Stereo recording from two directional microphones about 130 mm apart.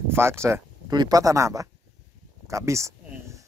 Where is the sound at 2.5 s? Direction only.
25° right (ahead or behind).